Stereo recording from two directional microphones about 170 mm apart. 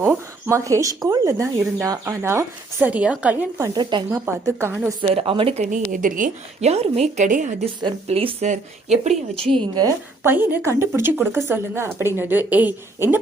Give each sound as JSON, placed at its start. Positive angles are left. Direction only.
{"t": 0.0, "sound": "speech", "side_deg": -15}
{"t": 3.6, "sound": "speech", "side_deg": -25}
{"t": 4.3, "sound": "speech", "side_deg": -15}
{"t": 5.0, "sound": "speech", "side_deg": -35}
{"t": 5.7, "sound": "a woman's voice", "side_deg": -50}
{"t": 8.0, "sound": "speech", "side_deg": -35}
{"t": 9.7, "sound": "speech", "side_deg": -15}